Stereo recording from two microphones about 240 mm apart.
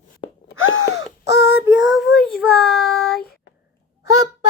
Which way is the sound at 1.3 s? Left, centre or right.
Left.